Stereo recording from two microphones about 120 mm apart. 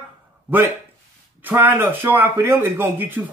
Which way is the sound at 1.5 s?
15° right (ahead or behind).